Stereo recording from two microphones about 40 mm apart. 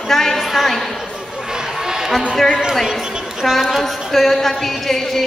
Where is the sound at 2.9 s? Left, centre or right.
Centre.